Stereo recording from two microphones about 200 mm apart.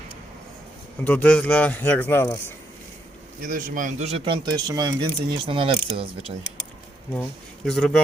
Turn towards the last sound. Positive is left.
turn(degrees=5)  # may be behind; listen again after turning